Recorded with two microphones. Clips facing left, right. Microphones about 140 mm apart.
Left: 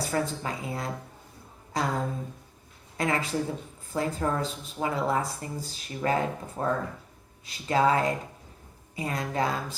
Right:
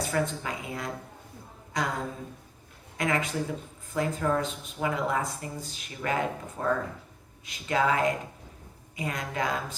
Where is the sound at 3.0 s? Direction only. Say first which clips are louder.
Left 1 dB; 35° left (ahead or behind).